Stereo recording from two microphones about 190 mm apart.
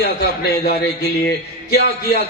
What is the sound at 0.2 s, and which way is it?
Speech, 55° left (ahead or behind).